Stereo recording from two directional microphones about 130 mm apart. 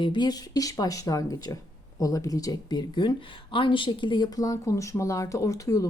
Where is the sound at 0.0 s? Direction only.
35° left (ahead or behind).